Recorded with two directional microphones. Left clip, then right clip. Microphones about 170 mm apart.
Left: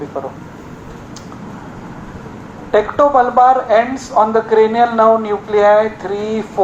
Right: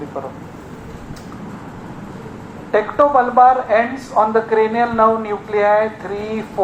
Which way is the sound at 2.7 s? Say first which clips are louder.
Left 2 dB; 30° left (ahead or behind).